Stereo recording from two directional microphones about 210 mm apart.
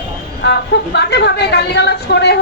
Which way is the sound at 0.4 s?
55° left (ahead or behind).